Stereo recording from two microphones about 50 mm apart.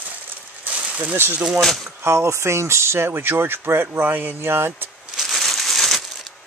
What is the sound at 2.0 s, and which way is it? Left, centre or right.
Speech, right.